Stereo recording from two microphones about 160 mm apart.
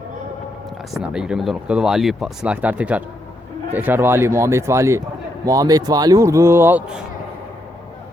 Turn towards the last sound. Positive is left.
turn(degrees=-5)  # may be behind; listen again after turning